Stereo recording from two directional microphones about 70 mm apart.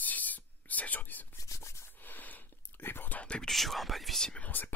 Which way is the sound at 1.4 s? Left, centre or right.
Left.